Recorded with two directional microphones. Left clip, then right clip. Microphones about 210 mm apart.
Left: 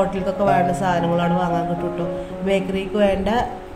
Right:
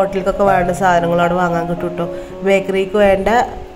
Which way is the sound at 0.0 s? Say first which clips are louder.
Right 5 dB; 20° right (ahead or behind).